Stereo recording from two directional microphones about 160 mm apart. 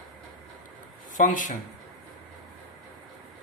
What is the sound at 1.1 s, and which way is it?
Speech, 55° left (ahead or behind).